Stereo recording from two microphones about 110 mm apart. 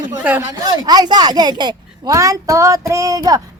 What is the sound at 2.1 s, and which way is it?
Speech, 30° right (ahead or behind).